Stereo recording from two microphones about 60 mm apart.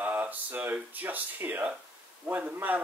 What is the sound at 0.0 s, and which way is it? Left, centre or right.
Speech, right.